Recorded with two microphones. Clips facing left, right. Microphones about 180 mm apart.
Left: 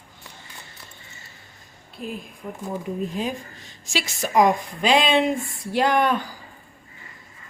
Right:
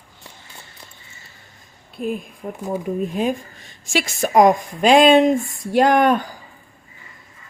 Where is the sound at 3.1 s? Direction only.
55° right (ahead or behind).